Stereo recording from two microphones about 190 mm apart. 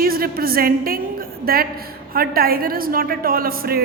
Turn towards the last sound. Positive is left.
turn(degrees=-50)  # may be behind; listen again after turning